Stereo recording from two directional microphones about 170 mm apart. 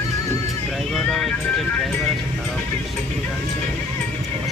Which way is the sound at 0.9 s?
Centre (ahead or behind).